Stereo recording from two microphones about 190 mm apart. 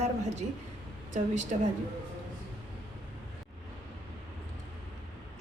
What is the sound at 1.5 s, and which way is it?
Speech, 40° right (ahead or behind).